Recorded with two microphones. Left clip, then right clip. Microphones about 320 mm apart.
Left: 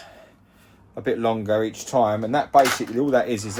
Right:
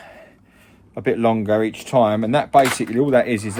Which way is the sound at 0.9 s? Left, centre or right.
Right.